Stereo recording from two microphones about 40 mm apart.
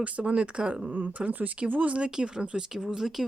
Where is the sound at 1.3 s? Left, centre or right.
Right.